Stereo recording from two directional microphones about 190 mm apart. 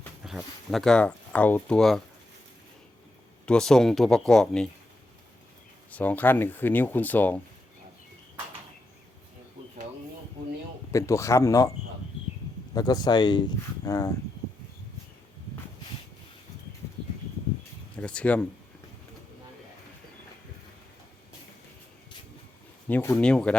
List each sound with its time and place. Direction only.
0.3 s speech: centre (ahead or behind)
3.4 s speech: 5° left (ahead or behind)
5.9 s speech: 10° left (ahead or behind)
10.9 s speech: 15° left (ahead or behind)
12.7 s speech: 20° left (ahead or behind)
17.9 s speech: 5° left (ahead or behind)
22.9 s speech: 10° left (ahead or behind)